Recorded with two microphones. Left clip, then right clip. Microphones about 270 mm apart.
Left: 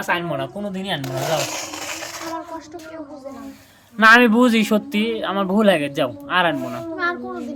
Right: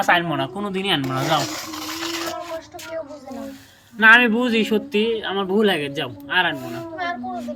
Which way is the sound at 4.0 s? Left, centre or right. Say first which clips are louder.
Left 1 dB; centre.